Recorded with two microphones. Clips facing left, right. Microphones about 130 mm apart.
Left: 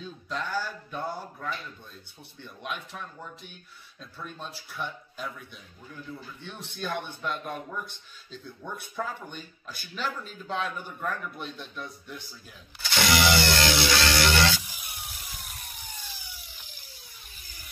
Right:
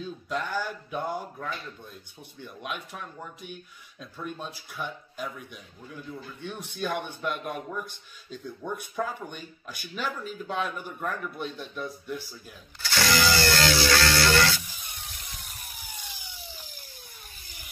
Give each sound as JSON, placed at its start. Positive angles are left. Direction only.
{"t": 0.0, "sound": "speech", "side_deg": -10}
{"t": 6.4, "sound": "speech", "side_deg": -10}
{"t": 13.1, "sound": "music", "side_deg": 20}
{"t": 15.1, "sound": "ratchet", "side_deg": 0}